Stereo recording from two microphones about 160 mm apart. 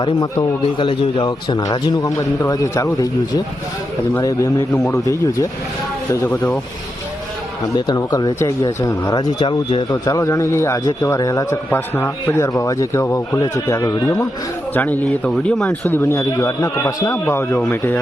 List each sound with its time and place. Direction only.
0.0 s speech: 25° left (ahead or behind); by 6.6 s 10° left (ahead or behind)
7.8 s speech: 25° left (ahead or behind)